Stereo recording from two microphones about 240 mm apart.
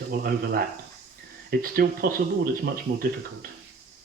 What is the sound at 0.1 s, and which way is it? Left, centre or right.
Speech, right.